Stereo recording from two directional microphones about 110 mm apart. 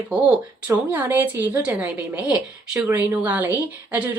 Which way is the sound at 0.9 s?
15° right (ahead or behind).